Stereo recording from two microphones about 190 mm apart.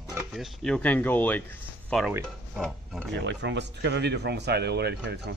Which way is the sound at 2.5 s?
Centre (ahead or behind).